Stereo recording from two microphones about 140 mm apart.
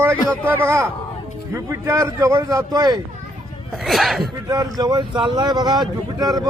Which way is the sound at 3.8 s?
Centre (ahead or behind).